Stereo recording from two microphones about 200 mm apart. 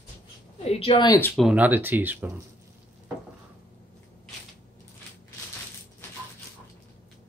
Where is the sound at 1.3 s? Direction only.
5° right (ahead or behind).